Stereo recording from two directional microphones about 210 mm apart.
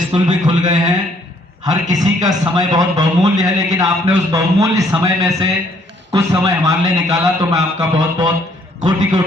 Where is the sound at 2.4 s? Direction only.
15° right (ahead or behind).